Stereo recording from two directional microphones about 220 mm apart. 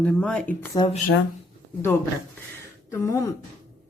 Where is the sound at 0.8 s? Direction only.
25° left (ahead or behind).